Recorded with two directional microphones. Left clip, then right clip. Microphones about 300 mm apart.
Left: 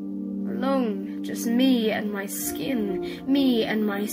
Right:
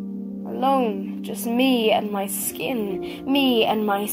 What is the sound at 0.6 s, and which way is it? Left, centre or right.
Speech, right.